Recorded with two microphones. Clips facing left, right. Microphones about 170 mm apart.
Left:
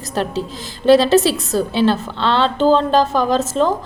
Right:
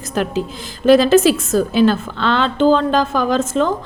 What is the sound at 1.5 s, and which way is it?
A woman's voice, 30° left (ahead or behind).